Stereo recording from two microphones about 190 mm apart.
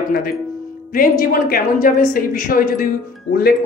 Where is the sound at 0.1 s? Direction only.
55° left (ahead or behind).